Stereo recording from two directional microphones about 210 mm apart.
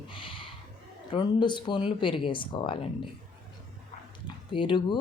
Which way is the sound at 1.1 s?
20° left (ahead or behind).